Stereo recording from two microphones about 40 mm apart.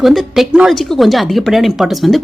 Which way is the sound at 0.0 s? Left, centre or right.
Centre.